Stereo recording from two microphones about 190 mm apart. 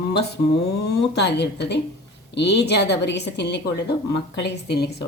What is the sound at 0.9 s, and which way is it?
A woman's voice, 65° left (ahead or behind).